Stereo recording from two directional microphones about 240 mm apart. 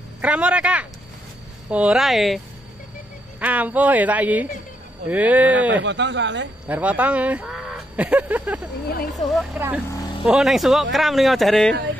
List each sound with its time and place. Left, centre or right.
0.2 s speech: centre
5.7 s speech: right
6.7 s speech: centre